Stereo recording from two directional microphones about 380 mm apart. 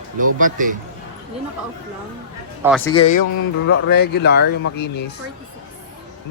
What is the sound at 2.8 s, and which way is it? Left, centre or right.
Speech, centre.